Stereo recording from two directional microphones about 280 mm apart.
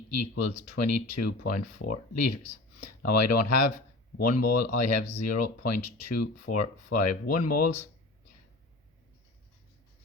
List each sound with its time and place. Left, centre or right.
0.1 s speech: left